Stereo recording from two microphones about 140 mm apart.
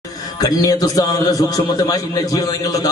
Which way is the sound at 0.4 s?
25° left (ahead or behind).